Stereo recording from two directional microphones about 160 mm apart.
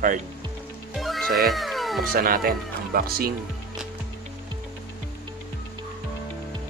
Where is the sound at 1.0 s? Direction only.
Centre (ahead or behind).